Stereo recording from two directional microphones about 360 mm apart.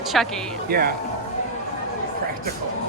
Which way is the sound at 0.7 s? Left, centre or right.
Right.